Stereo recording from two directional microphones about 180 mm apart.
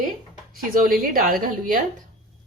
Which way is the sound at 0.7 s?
55° right (ahead or behind).